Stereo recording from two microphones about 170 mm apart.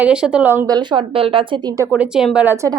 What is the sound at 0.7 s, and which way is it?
A woman's voice, 25° right (ahead or behind).